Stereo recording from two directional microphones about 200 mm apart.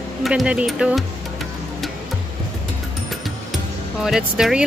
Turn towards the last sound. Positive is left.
turn(degrees=-5)  # may be behind; listen again after turning